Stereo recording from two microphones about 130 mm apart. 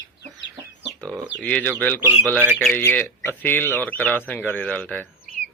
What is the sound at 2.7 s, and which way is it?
Speech, 15° left (ahead or behind).